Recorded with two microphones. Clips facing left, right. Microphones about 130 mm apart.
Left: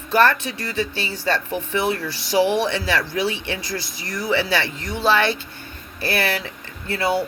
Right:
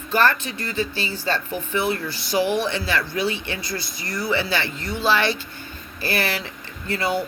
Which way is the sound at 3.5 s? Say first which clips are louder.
Left 2 dB; 90° left.